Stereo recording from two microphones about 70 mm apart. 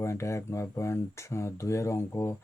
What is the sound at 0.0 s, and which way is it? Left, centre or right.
Speech, left.